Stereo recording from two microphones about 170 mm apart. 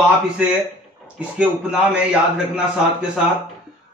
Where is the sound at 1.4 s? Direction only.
5° right (ahead or behind).